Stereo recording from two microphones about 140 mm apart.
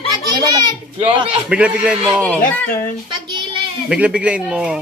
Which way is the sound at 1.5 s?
10° right (ahead or behind).